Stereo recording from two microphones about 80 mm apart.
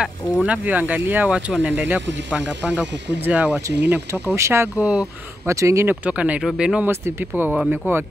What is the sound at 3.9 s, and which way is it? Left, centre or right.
Speech, right.